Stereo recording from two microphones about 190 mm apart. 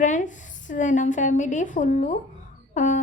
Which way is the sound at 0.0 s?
40° left (ahead or behind).